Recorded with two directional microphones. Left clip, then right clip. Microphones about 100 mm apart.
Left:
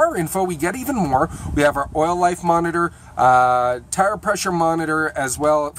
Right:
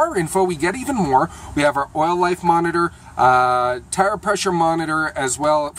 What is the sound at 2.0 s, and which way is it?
Speech, 25° left (ahead or behind).